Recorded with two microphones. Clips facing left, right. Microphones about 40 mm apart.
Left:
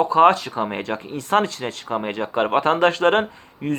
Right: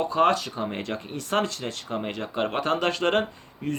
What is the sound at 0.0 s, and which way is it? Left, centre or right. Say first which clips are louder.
A man's voice: left 7 dB; left.